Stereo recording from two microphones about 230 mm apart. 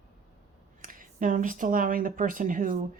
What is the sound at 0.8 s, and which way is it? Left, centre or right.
Speech, right.